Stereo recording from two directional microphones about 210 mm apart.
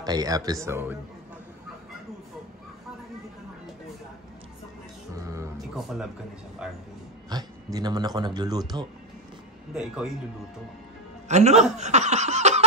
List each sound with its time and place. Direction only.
0.0 s speech: 15° right (ahead or behind)
5.6 s music: centre (ahead or behind)
6.6 s speech: 5° right (ahead or behind)
7.2 s a man's voice: 20° right (ahead or behind)
9.8 s speech: 5° right (ahead or behind)
11.2 s a man's voice: 30° right (ahead or behind)
11.7 s laughter: 35° right (ahead or behind)